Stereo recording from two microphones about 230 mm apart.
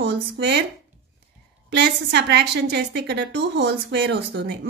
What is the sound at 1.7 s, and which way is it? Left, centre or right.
A woman's voice, right.